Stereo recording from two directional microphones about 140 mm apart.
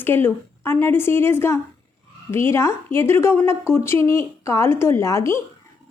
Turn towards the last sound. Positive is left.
turn(degrees=20)  # may be behind; listen again after turning